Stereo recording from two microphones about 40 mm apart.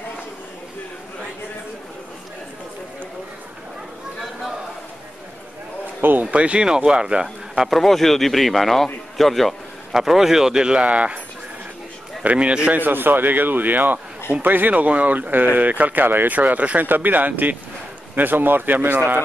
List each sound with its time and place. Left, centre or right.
5.9 s a sound: right
6.3 s speech: right
6.6 s speech: centre
7.6 s speech: centre
9.9 s speech: centre
10.9 s speech: right
12.2 s speech: right
12.7 s speech: right
15.1 s speech: right
16.3 s speech: right
16.8 s speech: right